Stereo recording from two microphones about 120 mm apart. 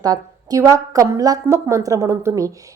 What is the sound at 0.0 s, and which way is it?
A woman's voice, 30° right (ahead or behind).